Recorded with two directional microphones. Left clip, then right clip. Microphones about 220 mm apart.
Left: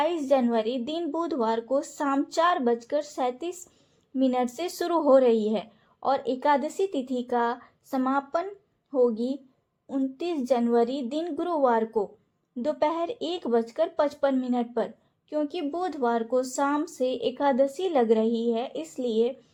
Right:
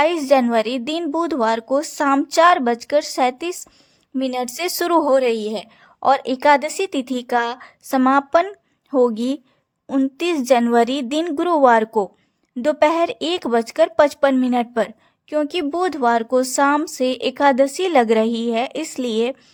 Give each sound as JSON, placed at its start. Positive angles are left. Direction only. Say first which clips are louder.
{"t": 0.0, "sound": "a woman's voice", "louder": "right 8 dB", "side_deg": -25}